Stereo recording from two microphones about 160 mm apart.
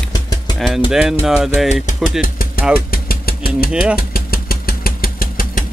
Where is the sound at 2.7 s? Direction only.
70° left (ahead or behind).